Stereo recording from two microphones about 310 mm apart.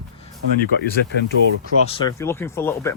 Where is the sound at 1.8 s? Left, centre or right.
Centre.